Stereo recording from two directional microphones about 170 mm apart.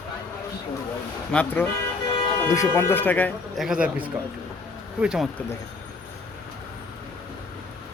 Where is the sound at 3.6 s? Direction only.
5° right (ahead or behind).